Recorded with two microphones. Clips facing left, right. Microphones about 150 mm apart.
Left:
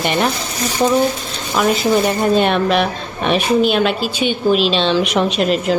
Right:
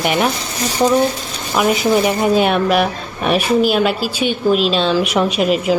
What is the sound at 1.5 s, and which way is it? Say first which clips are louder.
A woman's voice: even; 10° right (ahead or behind).